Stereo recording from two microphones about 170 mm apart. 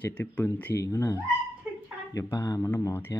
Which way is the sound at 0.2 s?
10° left (ahead or behind).